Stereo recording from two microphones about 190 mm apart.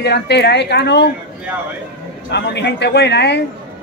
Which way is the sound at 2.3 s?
65° left (ahead or behind).